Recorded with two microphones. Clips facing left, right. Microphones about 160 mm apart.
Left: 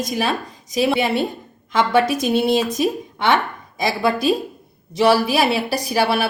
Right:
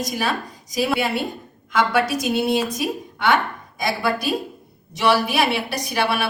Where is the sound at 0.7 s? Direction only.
25° left (ahead or behind).